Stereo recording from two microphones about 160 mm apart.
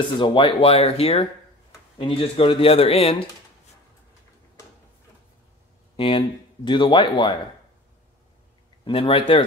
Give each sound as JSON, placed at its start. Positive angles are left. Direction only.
{"t": 0.2, "sound": "speech", "side_deg": 30}
{"t": 5.9, "sound": "speech", "side_deg": 30}
{"t": 8.8, "sound": "speech", "side_deg": 35}